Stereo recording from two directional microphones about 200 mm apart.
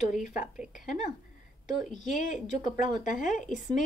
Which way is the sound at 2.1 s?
40° left (ahead or behind).